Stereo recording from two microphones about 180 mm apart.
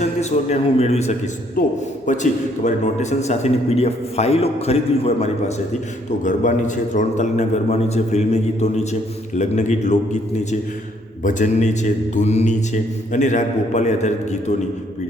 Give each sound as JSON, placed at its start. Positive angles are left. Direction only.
{"t": 0.0, "sound": "a man's voice", "side_deg": 40}
{"t": 1.6, "sound": "a man's voice", "side_deg": 50}